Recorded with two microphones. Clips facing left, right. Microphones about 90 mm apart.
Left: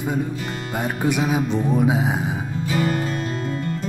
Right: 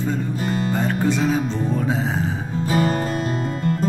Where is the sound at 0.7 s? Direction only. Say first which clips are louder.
Left 1 dB; 10° left (ahead or behind).